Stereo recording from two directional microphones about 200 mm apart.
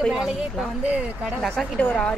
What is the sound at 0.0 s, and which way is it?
A woman's voice, centre (ahead or behind).